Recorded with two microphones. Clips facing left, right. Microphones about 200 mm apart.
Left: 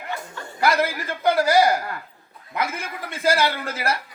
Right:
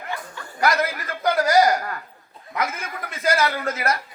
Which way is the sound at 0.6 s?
30° left (ahead or behind).